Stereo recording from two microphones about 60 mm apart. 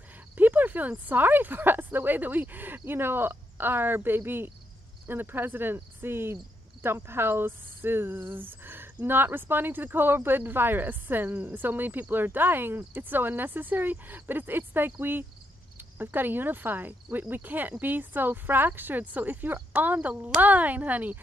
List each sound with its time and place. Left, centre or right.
0.4 s a woman's voice: right